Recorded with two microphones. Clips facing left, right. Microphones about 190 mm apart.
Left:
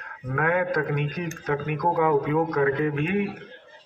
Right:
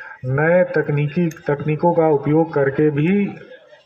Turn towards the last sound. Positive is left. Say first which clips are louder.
# right 9 dB
turn(degrees=-65)  # may be behind; listen again after turning